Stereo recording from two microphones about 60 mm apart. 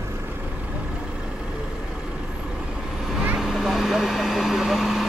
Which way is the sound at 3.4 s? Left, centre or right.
Centre.